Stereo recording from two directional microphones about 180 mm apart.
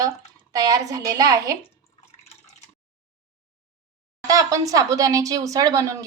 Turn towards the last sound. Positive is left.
turn(degrees=-20)  # may be behind; listen again after turning